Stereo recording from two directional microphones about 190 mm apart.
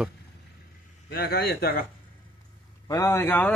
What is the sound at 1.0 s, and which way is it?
Speech, 55° left (ahead or behind).